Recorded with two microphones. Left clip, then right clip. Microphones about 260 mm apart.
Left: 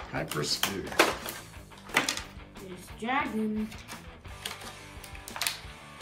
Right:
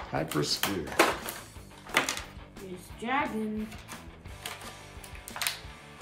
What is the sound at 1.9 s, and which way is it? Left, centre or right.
Music, centre.